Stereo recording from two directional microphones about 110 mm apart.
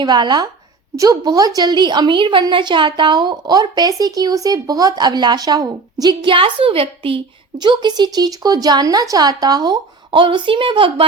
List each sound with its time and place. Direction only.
0.0 s a woman's voice: 40° right (ahead or behind); by 7.2 s 55° right (ahead or behind)
7.6 s a woman's voice: 45° right (ahead or behind)